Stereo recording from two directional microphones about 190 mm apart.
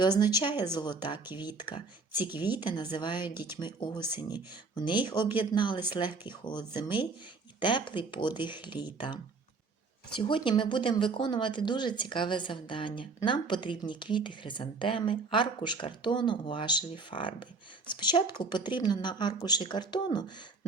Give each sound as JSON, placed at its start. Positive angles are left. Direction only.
{"t": 0.3, "sound": "speech", "side_deg": 20}
{"t": 10.2, "sound": "speech", "side_deg": 25}